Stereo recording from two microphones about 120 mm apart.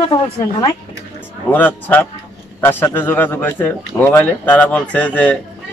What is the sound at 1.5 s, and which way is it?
A man's voice, 15° left (ahead or behind).